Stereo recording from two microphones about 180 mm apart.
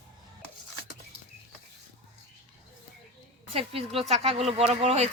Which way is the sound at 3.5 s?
30° right (ahead or behind).